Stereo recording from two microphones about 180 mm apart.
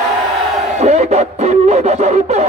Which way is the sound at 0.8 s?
40° right (ahead or behind).